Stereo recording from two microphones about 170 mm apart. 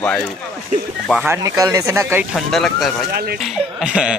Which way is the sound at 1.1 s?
15° right (ahead or behind).